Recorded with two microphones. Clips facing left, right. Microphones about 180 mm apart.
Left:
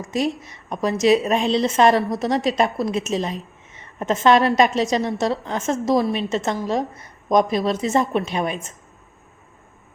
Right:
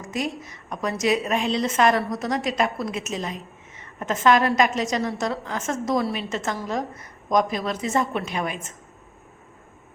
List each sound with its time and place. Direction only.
0.1 s a woman's voice: 25° left (ahead or behind)